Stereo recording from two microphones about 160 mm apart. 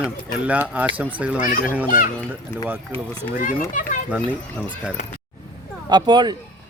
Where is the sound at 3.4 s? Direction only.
55° left (ahead or behind).